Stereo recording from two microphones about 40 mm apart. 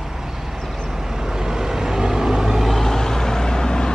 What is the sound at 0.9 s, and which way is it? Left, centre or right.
Vehicle, centre.